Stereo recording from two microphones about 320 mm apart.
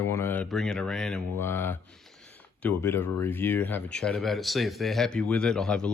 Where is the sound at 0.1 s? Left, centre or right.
Centre.